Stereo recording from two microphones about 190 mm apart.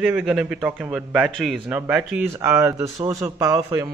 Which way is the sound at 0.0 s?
5° right (ahead or behind).